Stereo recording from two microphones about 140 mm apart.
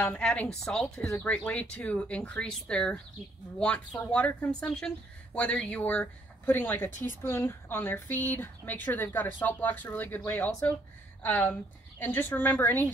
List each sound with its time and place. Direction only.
0.1 s a woman's voice: 5° left (ahead or behind)